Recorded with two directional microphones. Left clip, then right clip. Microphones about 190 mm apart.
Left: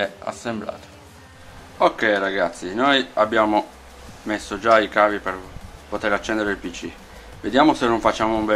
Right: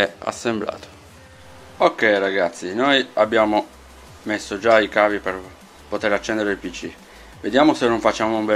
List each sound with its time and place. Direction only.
0.0 s speech: 40° right (ahead or behind)
1.8 s speech: 15° right (ahead or behind)